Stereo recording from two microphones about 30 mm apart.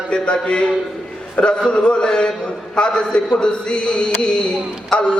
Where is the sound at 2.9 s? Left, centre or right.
Left.